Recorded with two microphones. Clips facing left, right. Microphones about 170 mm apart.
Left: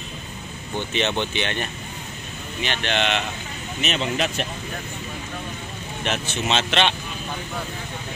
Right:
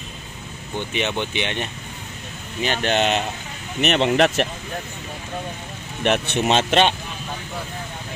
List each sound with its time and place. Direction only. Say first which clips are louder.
0.9 s speech: even; 10° right (ahead or behind)
2.6 s speech: right 4 dB; 40° right (ahead or behind)
3.8 s speech: right 7 dB; 65° right (ahead or behind)
6.0 s speech: right 6 dB; 60° right (ahead or behind); by 7.0 s 45° right (ahead or behind)